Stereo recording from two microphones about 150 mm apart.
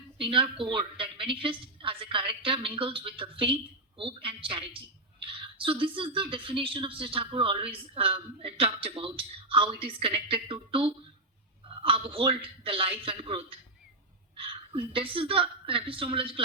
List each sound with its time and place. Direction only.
0.2 s speech: 35° right (ahead or behind)
14.7 s speech: 35° right (ahead or behind)